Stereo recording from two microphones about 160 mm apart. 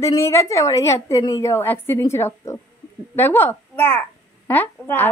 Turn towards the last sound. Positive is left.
turn(degrees=10)  # may be behind; listen again after turning